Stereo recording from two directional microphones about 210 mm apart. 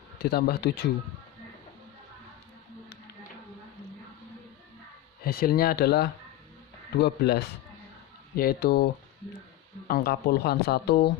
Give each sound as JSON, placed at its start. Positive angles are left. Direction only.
{"t": 0.2, "sound": "speech", "side_deg": 50}
{"t": 5.2, "sound": "speech", "side_deg": 45}
{"t": 9.9, "sound": "speech", "side_deg": 45}